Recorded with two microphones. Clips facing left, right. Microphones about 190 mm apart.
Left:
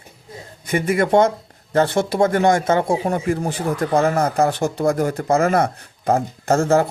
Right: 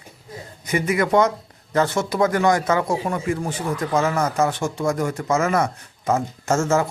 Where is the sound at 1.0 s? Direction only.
30° left (ahead or behind).